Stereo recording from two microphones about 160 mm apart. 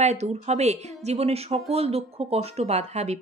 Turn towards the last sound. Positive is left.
turn(degrees=-45)  # may be behind; listen again after turning